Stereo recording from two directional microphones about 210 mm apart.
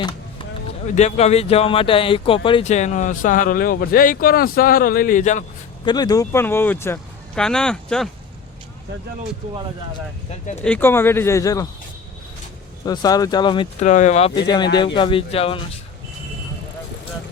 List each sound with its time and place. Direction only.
0.9 s speech: 30° left (ahead or behind)
5.8 s speech: 20° left (ahead or behind); by 8.1 s 5° left (ahead or behind)
10.6 s speech: 5° left (ahead or behind)
12.8 s speech: 20° left (ahead or behind)
13.8 s speech: 35° left (ahead or behind)